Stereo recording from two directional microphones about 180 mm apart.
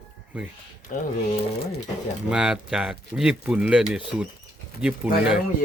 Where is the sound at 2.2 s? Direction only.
5° right (ahead or behind).